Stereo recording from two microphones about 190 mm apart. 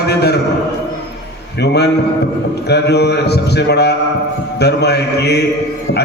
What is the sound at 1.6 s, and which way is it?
Mantra, 60° left (ahead or behind).